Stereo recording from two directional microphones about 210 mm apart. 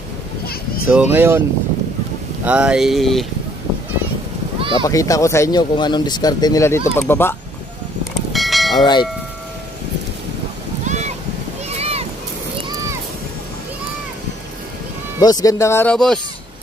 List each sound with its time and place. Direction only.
0.8 s speech: 10° right (ahead or behind)
2.4 s speech: 5° right (ahead or behind)
4.6 s a sound: 25° right (ahead or behind)
4.8 s speech: 15° left (ahead or behind)
8.3 s church bell: centre (ahead or behind)
8.7 s church bell: 20° left (ahead or behind)
10.9 s a sound: 35° right (ahead or behind)
15.1 s speech: 15° left (ahead or behind)